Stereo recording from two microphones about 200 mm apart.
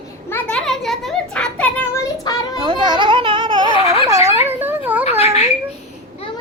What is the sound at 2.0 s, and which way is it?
Child singing, 20° left (ahead or behind).